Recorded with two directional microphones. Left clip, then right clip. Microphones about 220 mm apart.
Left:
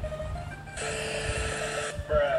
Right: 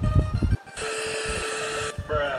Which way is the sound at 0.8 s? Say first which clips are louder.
Right 3 dB; 50° right (ahead or behind).